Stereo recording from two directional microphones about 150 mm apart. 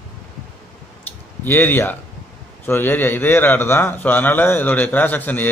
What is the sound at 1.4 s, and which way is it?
A man's voice, 15° left (ahead or behind).